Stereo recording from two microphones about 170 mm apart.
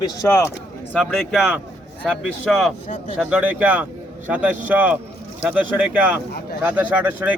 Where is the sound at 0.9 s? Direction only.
Centre (ahead or behind).